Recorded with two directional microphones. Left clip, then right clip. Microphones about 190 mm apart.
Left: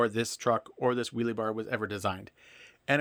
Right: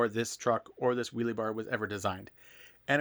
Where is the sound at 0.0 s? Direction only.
10° left (ahead or behind).